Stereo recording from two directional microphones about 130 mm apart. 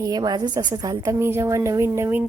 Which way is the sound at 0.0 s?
30° right (ahead or behind).